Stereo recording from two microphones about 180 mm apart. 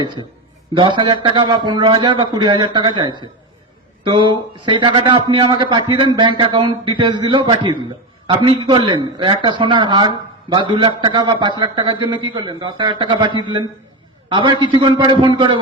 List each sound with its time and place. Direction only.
0.7 s a man's voice: 25° right (ahead or behind)